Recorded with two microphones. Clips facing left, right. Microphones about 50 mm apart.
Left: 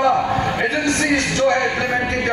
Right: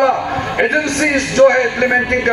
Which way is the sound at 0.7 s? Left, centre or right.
Right.